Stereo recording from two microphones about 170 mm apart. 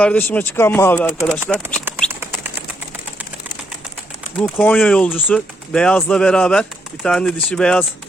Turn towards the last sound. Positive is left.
turn(degrees=5)  # may be behind; listen again after turning